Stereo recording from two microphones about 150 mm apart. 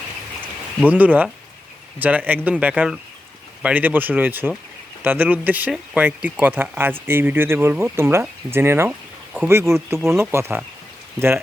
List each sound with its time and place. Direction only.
0.9 s speech: 10° right (ahead or behind)